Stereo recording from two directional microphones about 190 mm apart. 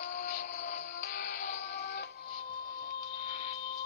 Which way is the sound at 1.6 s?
65° left (ahead or behind).